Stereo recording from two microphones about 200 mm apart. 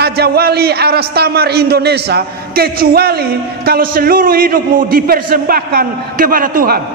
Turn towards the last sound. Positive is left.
turn(degrees=-45)  # may be behind; listen again after turning